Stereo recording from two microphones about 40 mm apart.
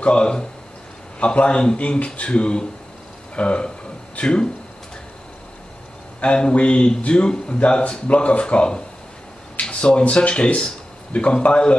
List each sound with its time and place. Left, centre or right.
0.0 s speech: left
1.8 s speech: left
6.2 s speech: left